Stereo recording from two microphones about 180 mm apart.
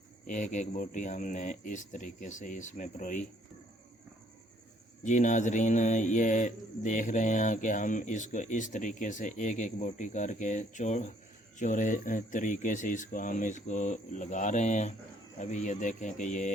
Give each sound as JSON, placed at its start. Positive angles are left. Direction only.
{"t": 0.3, "sound": "speech", "side_deg": 45}
{"t": 5.0, "sound": "speech", "side_deg": 45}